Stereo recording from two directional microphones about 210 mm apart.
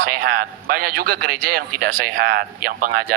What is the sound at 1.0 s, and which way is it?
Speech, 45° right (ahead or behind).